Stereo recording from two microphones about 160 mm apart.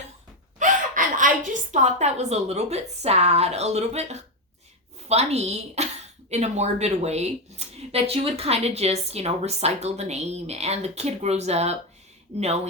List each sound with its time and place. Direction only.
0.6 s laughter: 55° right (ahead or behind)
1.7 s a woman's voice: 45° right (ahead or behind)